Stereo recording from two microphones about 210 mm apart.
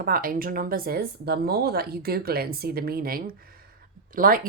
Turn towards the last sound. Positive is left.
turn(degrees=-40)  # may be behind; listen again after turning